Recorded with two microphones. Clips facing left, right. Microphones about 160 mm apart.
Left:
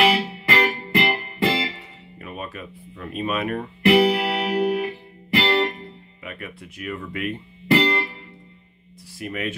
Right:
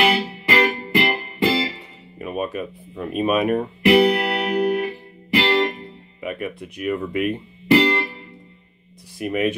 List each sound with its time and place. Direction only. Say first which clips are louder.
0.0 s music: even; centre (ahead or behind)
2.1 s speech: right 9 dB; 15° right (ahead or behind)
3.8 s music: right 1 dB; centre (ahead or behind)
5.3 s music: right 2 dB; 10° right (ahead or behind)
6.2 s speech: right 8 dB; 15° right (ahead or behind)
9.2 s speech: right 7 dB; 15° right (ahead or behind)